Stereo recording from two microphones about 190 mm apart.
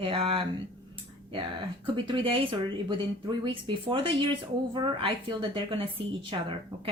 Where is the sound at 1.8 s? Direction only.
25° right (ahead or behind).